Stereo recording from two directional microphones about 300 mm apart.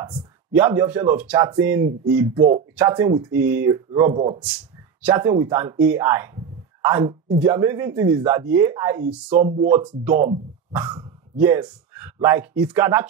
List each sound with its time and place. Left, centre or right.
0.0 s speech: centre
2.8 s speech: centre
9.3 s speech: right
9.7 s speech: centre
10.1 s speech: right; by 13.0 s centre